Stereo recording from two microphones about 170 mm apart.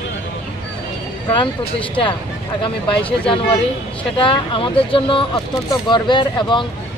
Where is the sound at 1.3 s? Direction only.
30° left (ahead or behind).